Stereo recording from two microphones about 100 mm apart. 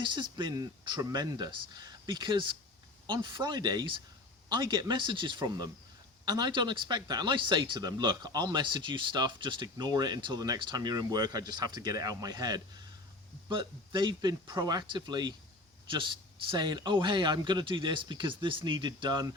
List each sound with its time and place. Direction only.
0.0 s speech: 50° right (ahead or behind)